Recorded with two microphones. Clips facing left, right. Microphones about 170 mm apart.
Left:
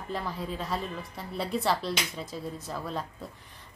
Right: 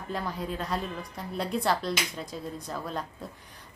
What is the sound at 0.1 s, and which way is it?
Speech, centre (ahead or behind).